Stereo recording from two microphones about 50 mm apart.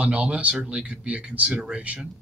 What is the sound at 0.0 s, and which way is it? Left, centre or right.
Speech, right.